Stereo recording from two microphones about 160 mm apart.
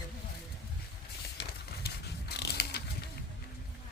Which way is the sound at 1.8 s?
85° left.